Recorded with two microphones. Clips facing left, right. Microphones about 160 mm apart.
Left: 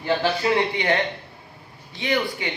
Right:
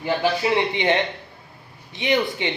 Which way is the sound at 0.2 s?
20° right (ahead or behind).